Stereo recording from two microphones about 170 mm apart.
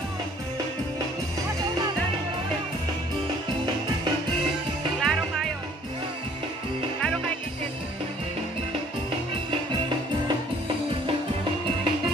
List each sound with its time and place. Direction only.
5.0 s music: centre (ahead or behind)